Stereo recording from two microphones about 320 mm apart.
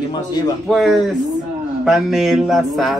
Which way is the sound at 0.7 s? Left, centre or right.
Centre.